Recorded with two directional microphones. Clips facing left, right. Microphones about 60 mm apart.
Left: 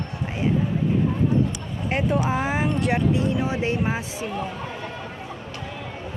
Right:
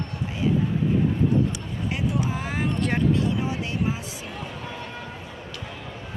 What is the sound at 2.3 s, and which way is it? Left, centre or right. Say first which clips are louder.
Speech: left 4 dB; left.